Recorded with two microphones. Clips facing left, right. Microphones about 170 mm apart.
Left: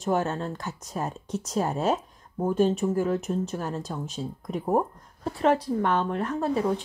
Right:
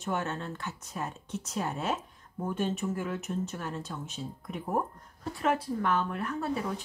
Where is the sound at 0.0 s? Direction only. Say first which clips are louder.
Left 7 dB; 40° left (ahead or behind).